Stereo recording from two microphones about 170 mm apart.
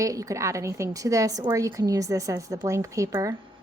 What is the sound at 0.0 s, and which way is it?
A woman's voice, 20° right (ahead or behind).